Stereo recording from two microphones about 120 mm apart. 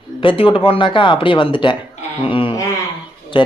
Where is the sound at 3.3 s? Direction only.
40° left (ahead or behind).